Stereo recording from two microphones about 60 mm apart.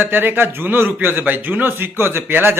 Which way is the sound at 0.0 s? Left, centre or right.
Right.